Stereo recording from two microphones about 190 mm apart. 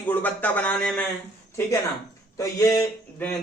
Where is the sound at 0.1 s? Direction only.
10° left (ahead or behind).